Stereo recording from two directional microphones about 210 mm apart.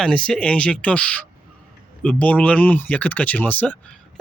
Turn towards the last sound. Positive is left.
turn(degrees=5)  # may be behind; listen again after turning